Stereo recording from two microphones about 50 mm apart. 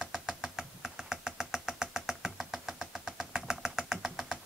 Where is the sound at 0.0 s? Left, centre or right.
Centre.